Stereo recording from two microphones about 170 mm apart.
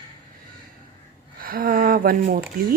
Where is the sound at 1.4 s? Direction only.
60° right (ahead or behind).